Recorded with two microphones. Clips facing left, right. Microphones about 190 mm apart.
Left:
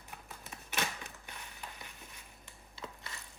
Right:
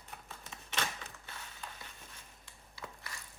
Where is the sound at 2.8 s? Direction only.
25° left (ahead or behind).